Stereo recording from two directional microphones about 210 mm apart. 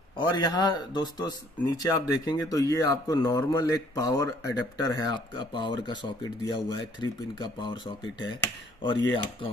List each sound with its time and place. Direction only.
0.2 s a man's voice: 20° left (ahead or behind)